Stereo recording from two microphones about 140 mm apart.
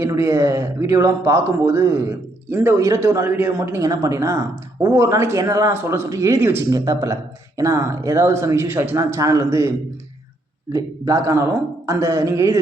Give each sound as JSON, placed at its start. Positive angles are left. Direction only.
{"t": 0.0, "sound": "speech", "side_deg": -20}